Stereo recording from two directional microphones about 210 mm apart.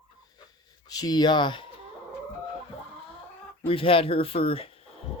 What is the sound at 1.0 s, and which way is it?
Speech, 20° left (ahead or behind).